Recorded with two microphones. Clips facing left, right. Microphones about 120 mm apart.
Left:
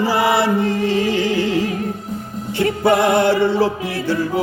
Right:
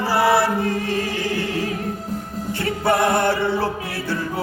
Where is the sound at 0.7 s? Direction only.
45° right (ahead or behind).